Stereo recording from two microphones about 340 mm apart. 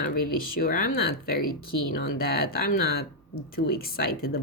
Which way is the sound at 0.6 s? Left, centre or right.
Left.